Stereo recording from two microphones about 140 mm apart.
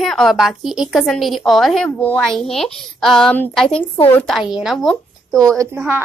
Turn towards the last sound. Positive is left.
turn(degrees=-15)  # may be behind; listen again after turning